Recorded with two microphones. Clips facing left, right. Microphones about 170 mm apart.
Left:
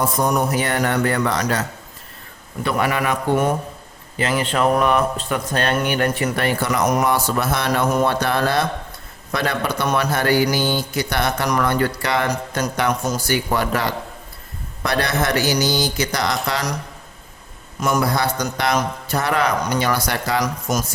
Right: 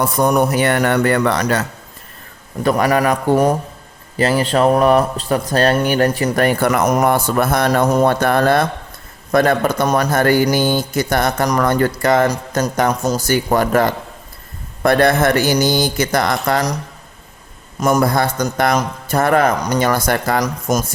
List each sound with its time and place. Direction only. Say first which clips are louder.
0.2 s speech: right 7 dB; 65° right (ahead or behind)
2.6 s a man's voice: right 6 dB; 40° right (ahead or behind)
17.7 s speech: right 5 dB; 45° right (ahead or behind)